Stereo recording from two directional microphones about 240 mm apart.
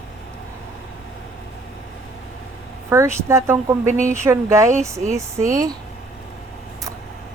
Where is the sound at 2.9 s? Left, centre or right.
Centre.